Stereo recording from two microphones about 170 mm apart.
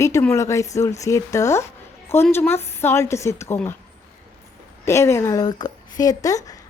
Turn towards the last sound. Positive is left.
turn(degrees=20)  # may be behind; listen again after turning